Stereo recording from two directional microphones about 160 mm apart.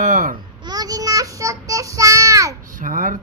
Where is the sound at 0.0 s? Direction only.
55° right (ahead or behind).